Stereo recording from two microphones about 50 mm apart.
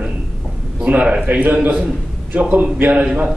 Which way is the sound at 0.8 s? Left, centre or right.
Right.